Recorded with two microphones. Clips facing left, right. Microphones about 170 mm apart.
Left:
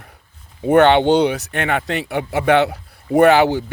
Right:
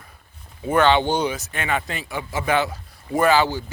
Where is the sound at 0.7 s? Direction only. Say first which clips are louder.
Left 6 dB; 65° left (ahead or behind).